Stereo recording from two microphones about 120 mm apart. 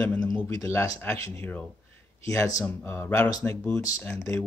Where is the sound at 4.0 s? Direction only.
15° left (ahead or behind).